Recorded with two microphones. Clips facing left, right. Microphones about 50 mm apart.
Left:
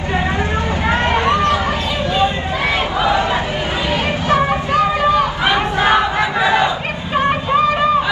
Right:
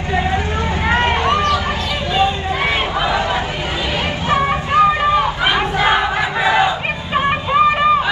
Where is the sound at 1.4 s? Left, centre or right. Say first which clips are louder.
Left 1 dB; left.